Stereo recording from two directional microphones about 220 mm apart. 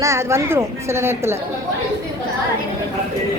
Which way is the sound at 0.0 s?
15° right (ahead or behind).